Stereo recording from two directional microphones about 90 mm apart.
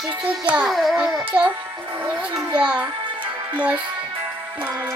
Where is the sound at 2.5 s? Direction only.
15° right (ahead or behind).